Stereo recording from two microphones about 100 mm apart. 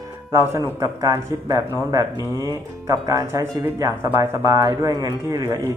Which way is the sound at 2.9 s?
35° right (ahead or behind).